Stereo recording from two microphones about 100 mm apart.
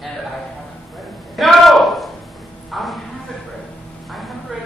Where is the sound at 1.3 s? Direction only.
Centre (ahead or behind).